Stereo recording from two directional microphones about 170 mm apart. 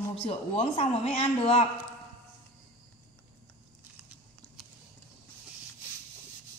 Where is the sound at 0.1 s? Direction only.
35° left (ahead or behind).